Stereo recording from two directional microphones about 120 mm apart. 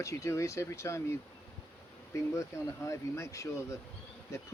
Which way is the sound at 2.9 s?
25° left (ahead or behind).